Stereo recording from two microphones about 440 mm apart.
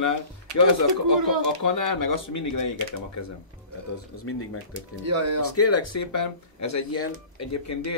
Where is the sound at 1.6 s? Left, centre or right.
Left.